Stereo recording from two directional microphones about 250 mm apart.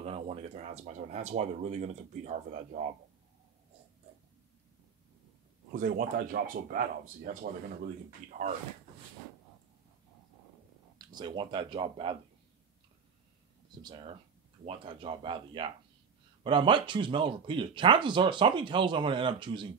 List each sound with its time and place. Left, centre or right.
0.0 s speech: right
5.7 s speech: right
11.0 s speech: centre
13.8 s speech: centre